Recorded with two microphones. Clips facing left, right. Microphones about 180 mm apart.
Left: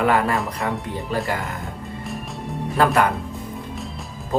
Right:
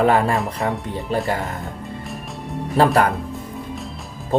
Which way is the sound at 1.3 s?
35° right (ahead or behind).